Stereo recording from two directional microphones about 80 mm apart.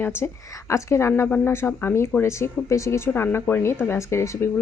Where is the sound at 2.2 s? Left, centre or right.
Left.